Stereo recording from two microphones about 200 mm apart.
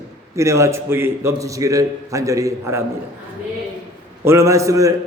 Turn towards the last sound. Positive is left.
turn(degrees=-15)  # may be behind; listen again after turning